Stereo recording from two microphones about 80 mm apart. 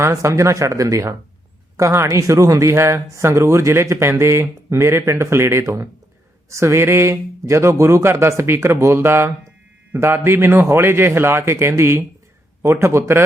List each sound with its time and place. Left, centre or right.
0.0 s speech: right